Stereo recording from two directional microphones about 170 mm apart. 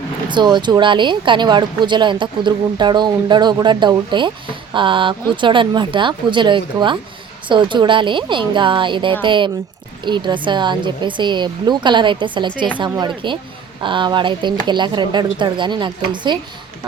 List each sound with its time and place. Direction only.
0.3 s speech: 25° right (ahead or behind)